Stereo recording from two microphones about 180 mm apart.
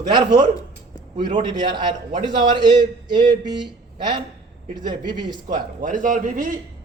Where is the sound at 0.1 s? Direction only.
25° right (ahead or behind).